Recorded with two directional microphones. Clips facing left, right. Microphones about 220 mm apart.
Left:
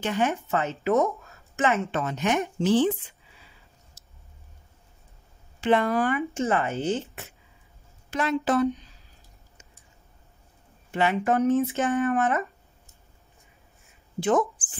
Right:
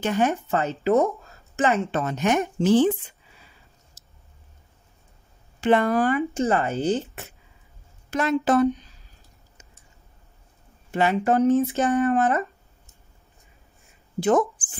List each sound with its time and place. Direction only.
0.0 s a woman's voice: 40° right (ahead or behind)
5.6 s a woman's voice: 45° right (ahead or behind)
10.9 s a woman's voice: 40° right (ahead or behind)